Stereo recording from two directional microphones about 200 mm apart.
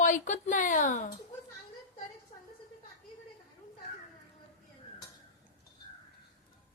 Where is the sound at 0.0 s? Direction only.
40° left (ahead or behind).